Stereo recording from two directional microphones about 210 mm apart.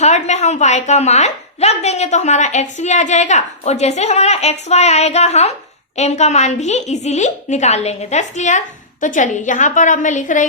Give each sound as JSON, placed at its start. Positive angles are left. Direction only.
{"t": 0.0, "sound": "a woman's voice", "side_deg": 35}